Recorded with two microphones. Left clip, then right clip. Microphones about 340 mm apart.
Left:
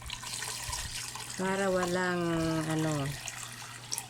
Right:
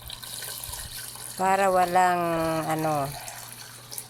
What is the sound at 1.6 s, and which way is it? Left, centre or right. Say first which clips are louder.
Speech: right 9 dB; right.